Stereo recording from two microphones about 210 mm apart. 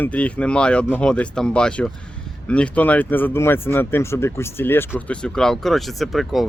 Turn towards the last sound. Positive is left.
turn(degrees=0)  # may be behind; listen again after turning